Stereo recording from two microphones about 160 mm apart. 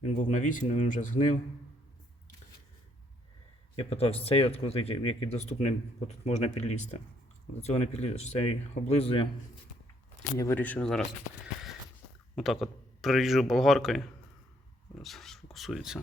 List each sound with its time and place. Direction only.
0.0 s speech: 50° left (ahead or behind)
3.8 s speech: 40° left (ahead or behind)
10.3 s speech: 20° left (ahead or behind)
10.6 s speech: 10° left (ahead or behind)
12.4 s speech: centre (ahead or behind)